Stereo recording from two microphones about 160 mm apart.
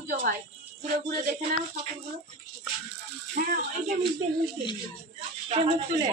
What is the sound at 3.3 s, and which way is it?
Speech, 60° right (ahead or behind).